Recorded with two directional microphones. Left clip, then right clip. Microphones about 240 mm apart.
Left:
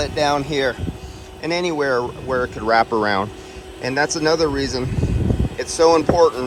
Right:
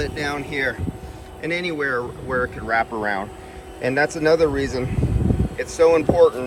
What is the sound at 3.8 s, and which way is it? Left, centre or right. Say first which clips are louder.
A man's voice: even; centre.